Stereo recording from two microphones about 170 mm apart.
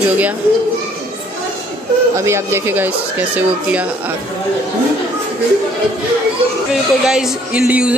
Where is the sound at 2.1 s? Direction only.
15° right (ahead or behind).